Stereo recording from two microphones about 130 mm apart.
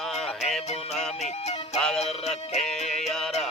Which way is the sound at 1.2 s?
60° left (ahead or behind).